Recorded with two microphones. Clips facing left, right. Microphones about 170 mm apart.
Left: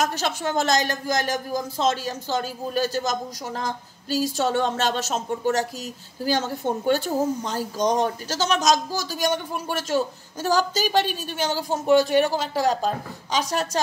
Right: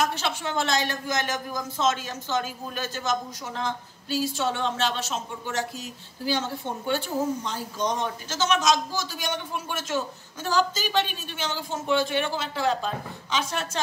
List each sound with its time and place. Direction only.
0.0 s speech: 40° left (ahead or behind)